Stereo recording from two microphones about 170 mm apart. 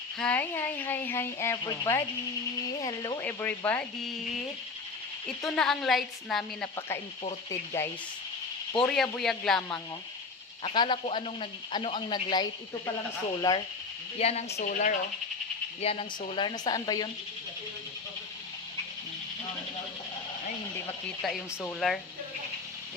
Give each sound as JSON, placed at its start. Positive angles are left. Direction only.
{"t": 0.2, "sound": "speech", "side_deg": 10}
{"t": 3.2, "sound": "speech", "side_deg": 10}
{"t": 5.4, "sound": "a woman's voice", "side_deg": 0}
{"t": 6.7, "sound": "speech", "side_deg": 15}
{"t": 8.8, "sound": "a woman's voice", "side_deg": 5}
{"t": 10.6, "sound": "speech", "side_deg": 30}
{"t": 14.2, "sound": "speech", "side_deg": 40}
{"t": 15.8, "sound": "speech", "side_deg": 35}
{"t": 20.8, "sound": "a woman's voice", "side_deg": 5}